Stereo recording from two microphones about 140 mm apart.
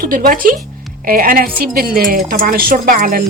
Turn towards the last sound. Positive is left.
turn(degrees=-90)